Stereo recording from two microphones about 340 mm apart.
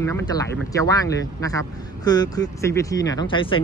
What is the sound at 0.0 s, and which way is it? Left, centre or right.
Speech, centre.